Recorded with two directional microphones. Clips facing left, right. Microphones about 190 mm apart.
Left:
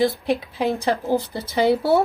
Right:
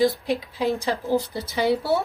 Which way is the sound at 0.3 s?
60° left (ahead or behind).